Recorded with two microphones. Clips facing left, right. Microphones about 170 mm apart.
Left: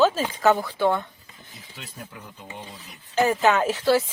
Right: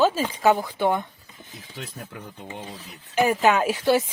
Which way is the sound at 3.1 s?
15° right (ahead or behind).